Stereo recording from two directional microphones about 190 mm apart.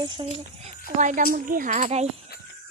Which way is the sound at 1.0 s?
45° right (ahead or behind).